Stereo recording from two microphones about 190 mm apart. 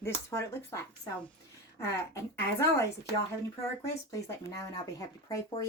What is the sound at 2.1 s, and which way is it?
Speech, 15° left (ahead or behind).